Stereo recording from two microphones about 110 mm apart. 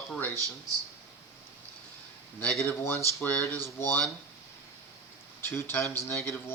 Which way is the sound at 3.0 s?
15° left (ahead or behind).